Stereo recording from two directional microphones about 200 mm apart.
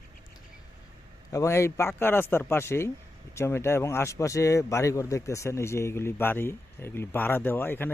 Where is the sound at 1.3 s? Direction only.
15° left (ahead or behind).